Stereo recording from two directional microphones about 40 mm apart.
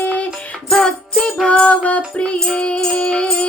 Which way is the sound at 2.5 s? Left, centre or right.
Left.